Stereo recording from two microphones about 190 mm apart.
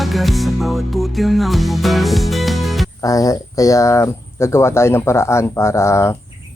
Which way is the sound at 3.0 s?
20° left (ahead or behind).